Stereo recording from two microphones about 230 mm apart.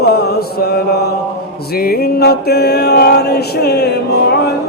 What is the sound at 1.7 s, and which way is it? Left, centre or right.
Mantra, left.